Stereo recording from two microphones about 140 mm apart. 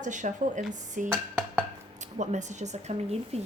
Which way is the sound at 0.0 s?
65° right (ahead or behind).